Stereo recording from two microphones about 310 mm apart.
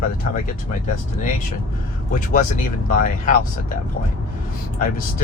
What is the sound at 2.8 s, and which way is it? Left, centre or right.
Speech, left.